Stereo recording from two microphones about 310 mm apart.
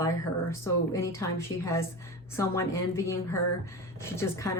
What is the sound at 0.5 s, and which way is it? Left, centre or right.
A woman's voice, centre.